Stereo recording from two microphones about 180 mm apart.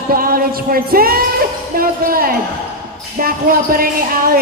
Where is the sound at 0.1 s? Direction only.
50° right (ahead or behind).